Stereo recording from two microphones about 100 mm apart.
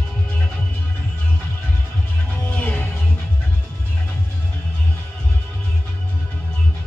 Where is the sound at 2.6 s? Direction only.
20° left (ahead or behind).